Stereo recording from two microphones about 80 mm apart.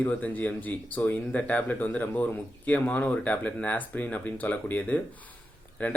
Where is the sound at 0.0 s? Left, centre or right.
Centre.